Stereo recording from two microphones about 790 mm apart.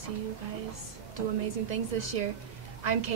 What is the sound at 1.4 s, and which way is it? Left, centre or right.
A woman's voice, right.